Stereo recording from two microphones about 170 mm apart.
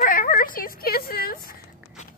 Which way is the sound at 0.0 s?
55° left (ahead or behind).